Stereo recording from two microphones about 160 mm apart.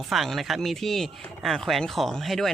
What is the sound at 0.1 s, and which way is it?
Speech, centre (ahead or behind).